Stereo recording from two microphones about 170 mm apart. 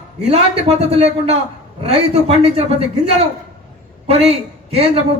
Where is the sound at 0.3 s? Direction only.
40° right (ahead or behind).